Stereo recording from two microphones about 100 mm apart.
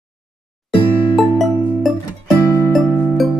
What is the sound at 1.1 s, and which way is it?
Music, centre (ahead or behind).